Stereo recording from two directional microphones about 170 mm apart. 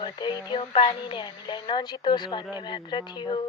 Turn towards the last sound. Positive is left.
turn(degrees=25)  # may be behind; listen again after turning